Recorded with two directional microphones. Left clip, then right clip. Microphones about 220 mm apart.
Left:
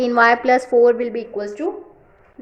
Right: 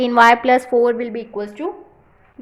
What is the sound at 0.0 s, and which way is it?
A woman's voice, 20° right (ahead or behind).